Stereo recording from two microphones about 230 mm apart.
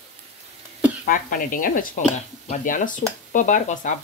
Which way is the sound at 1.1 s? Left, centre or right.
Left.